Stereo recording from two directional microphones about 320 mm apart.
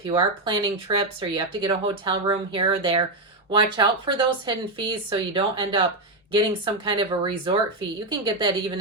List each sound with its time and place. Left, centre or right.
0.0 s speech: centre